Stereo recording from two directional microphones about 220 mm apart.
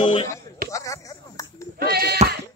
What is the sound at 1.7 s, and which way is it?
Bleat, 45° right (ahead or behind).